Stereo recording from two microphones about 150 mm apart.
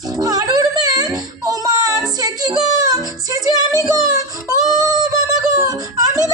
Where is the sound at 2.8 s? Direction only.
25° right (ahead or behind).